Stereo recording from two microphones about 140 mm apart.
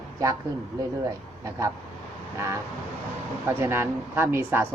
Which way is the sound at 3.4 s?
15° right (ahead or behind).